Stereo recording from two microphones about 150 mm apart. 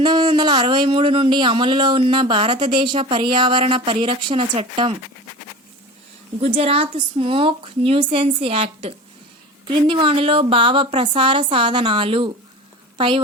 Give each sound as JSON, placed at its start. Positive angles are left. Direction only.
{"t": 0.0, "sound": "speech", "side_deg": -30}
{"t": 6.4, "sound": "speech", "side_deg": -40}